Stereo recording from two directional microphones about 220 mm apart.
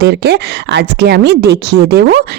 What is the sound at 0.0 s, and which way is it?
A woman's voice, 50° right (ahead or behind).